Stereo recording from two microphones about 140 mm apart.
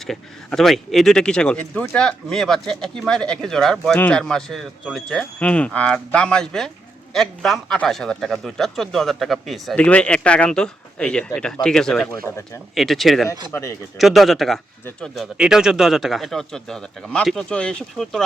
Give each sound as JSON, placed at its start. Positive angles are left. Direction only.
{"t": 0.1, "sound": "a man's voice", "side_deg": 0}
{"t": 13.5, "sound": "speech", "side_deg": 20}
{"t": 14.0, "sound": "a man's voice", "side_deg": 0}